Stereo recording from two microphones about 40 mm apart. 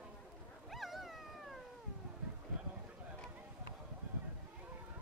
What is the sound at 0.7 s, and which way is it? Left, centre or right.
Cat, centre.